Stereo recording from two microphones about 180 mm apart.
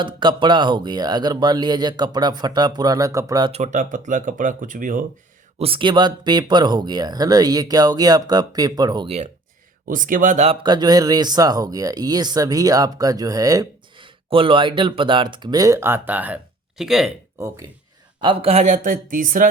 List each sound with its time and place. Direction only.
0.0 s speech: 25° right (ahead or behind)
3.5 s speech: 40° right (ahead or behind)
5.5 s speech: 30° right (ahead or behind)
9.0 s speech: 35° right (ahead or behind)
9.8 s speech: 50° right (ahead or behind); by 17.1 s centre (ahead or behind)
17.4 s speech: 15° right (ahead or behind)
18.2 s speech: 30° right (ahead or behind); by 19.5 s 50° right (ahead or behind)